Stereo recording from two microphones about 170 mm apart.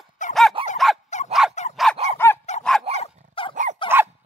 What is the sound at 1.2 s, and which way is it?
Dog, 45° left (ahead or behind).